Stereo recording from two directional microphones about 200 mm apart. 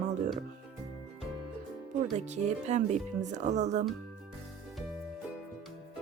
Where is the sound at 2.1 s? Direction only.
35° right (ahead or behind).